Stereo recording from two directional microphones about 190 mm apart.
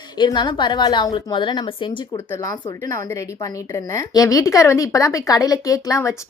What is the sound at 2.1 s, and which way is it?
A woman's voice, 15° left (ahead or behind).